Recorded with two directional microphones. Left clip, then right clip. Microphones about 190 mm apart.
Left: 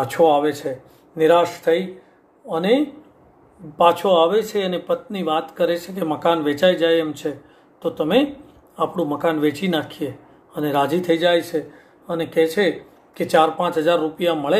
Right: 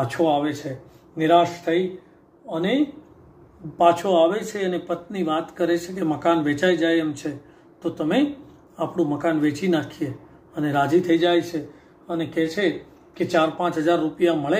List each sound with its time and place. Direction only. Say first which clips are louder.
0.1 s speech: left 9 dB; 20° left (ahead or behind)
3.7 s speech: left 2 dB; 15° left (ahead or behind)